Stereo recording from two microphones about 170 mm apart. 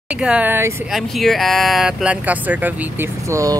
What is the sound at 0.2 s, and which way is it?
Speech, 10° right (ahead or behind).